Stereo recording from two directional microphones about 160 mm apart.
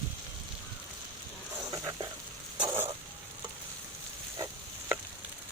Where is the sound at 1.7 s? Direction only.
20° right (ahead or behind).